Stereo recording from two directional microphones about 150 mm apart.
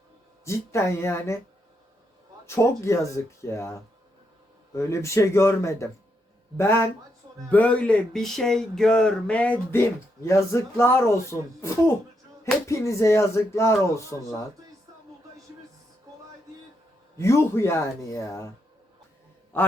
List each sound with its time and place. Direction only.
0.4 s speech: 20° left (ahead or behind)
2.5 s speech: 20° left (ahead or behind)
6.6 s a sound: 15° left (ahead or behind)
12.6 s speech: 20° left (ahead or behind)
17.2 s speech: 20° left (ahead or behind)
19.5 s a sound: 15° left (ahead or behind)